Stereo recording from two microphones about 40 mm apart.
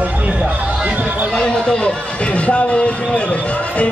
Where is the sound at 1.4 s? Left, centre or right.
Centre.